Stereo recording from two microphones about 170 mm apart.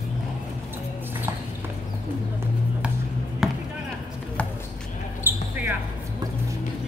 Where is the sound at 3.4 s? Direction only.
5° right (ahead or behind).